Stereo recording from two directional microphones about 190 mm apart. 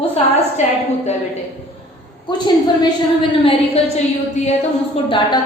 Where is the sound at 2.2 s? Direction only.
25° left (ahead or behind).